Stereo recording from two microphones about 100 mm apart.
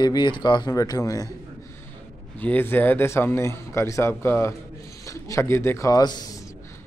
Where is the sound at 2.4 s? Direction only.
20° left (ahead or behind); by 6.3 s 45° left (ahead or behind).